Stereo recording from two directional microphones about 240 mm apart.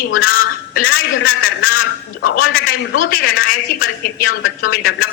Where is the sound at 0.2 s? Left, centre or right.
Left.